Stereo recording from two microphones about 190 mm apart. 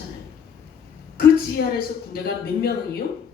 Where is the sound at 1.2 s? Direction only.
50° left (ahead or behind).